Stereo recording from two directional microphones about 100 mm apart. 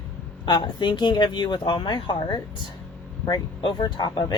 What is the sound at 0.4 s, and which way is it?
Speech, 50° left (ahead or behind).